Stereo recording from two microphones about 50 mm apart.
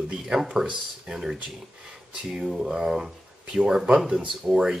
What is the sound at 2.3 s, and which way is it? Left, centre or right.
Speech, centre.